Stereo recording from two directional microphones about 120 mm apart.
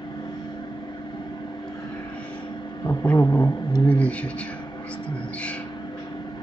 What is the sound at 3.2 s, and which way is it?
Vehicle, 25° left (ahead or behind).